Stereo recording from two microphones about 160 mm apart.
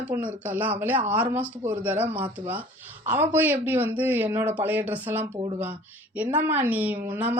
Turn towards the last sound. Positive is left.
turn(degrees=-10)  # may be behind; listen again after turning